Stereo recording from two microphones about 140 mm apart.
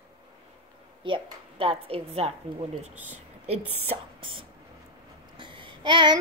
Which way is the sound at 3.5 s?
40° right (ahead or behind).